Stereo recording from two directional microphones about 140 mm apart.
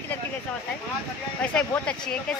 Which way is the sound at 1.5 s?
5° left (ahead or behind).